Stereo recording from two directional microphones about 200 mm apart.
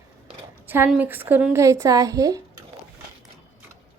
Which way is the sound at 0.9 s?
10° right (ahead or behind).